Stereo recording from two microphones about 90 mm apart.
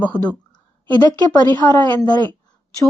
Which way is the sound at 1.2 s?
50° left (ahead or behind).